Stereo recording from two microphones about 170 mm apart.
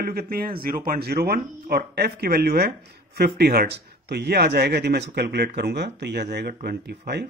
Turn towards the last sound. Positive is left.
turn(degrees=-75)  # may be behind; listen again after turning